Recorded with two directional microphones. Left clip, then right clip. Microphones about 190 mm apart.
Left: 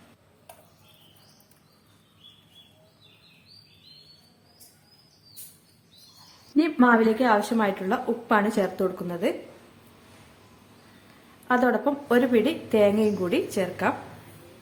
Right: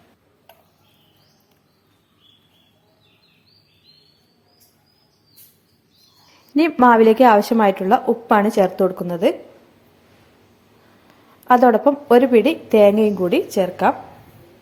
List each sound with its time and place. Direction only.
6.6 s a woman's voice: 35° right (ahead or behind)
11.4 s a woman's voice: 30° right (ahead or behind)